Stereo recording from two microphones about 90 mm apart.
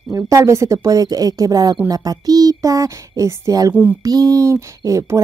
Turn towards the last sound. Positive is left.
turn(degrees=-35)  # may be behind; listen again after turning